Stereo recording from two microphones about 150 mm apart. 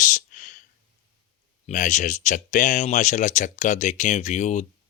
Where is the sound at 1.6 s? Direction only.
55° left (ahead or behind).